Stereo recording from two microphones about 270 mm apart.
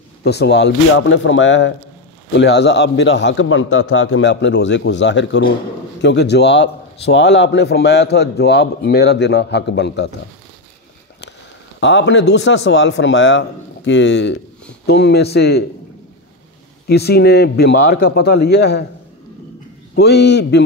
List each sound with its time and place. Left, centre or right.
0.2 s a man's voice: left
11.8 s a man's voice: left
16.8 s a man's voice: left
20.0 s a man's voice: left